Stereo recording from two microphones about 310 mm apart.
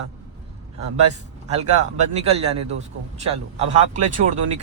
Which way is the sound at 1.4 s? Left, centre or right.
Right.